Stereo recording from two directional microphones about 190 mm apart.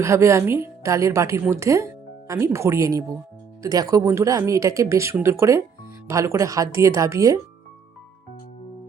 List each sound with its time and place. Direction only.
0.0 s a woman's voice: 15° right (ahead or behind)